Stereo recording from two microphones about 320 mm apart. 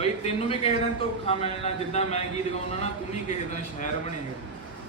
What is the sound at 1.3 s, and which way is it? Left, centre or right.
Speech, centre.